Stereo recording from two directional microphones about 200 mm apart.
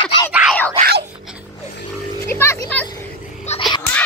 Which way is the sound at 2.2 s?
10° left (ahead or behind).